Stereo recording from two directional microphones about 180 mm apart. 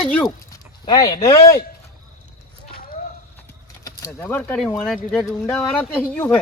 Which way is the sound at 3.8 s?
20° left (ahead or behind).